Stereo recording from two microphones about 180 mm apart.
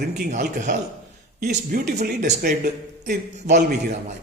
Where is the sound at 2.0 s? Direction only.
45° right (ahead or behind).